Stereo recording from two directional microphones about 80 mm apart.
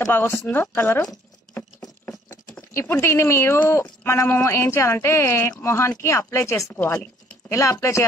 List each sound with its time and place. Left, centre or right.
0.1 s speech: left
1.6 s patter: left
2.7 s speech: left
6.8 s speech: left
7.4 s speech: left